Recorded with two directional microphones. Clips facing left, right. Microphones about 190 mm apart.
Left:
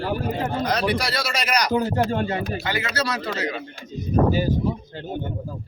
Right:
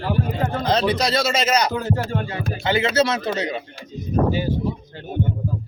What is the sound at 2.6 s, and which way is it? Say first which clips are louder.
Speech: right 7 dB; 25° right (ahead or behind).